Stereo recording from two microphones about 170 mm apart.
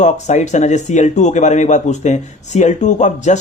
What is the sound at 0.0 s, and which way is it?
Speech, 45° left (ahead or behind).